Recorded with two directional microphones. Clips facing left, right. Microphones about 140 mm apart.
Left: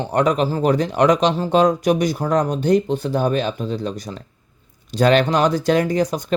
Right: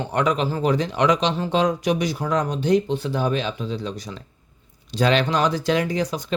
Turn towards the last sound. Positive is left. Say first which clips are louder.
# left 5 dB
turn(degrees=50)  # may be behind; listen again after turning